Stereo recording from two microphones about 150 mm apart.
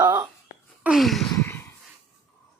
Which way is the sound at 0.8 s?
Centre (ahead or behind).